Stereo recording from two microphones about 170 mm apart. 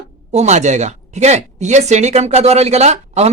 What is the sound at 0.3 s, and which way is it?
A woman's voice, 40° right (ahead or behind).